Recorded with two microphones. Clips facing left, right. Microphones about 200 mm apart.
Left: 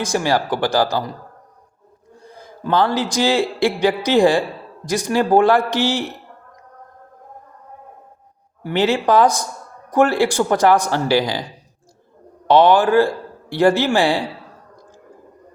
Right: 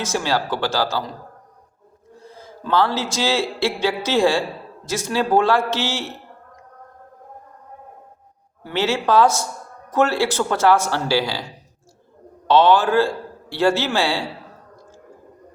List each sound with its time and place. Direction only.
0.0 s a man's voice: 15° left (ahead or behind)
2.1 s a man's voice: 15° left (ahead or behind)
8.6 s a man's voice: 15° left (ahead or behind)
12.5 s a man's voice: 15° left (ahead or behind)